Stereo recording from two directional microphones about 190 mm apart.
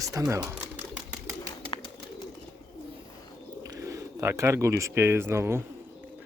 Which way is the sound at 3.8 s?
15° right (ahead or behind).